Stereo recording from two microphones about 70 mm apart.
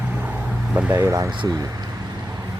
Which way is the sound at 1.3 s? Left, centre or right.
Right.